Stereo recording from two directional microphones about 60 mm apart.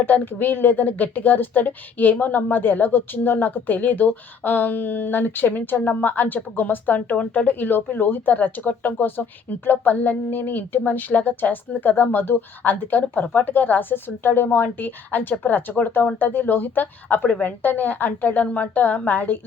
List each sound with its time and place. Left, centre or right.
0.0 s a woman's voice: left